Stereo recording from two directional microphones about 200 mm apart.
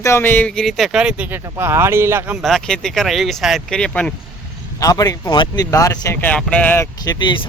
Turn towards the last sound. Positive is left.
turn(degrees=25)  # may be behind; listen again after turning